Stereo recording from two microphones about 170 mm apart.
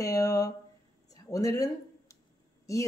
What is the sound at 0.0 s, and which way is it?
Speech, 20° left (ahead or behind).